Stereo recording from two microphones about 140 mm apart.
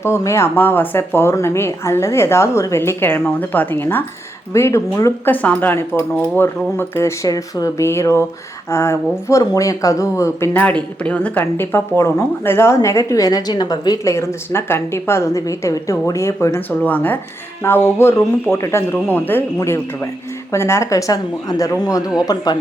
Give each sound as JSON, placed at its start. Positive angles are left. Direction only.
{"t": 0.0, "sound": "speech", "side_deg": 20}